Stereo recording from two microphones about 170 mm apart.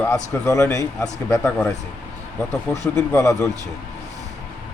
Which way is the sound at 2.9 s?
15° left (ahead or behind).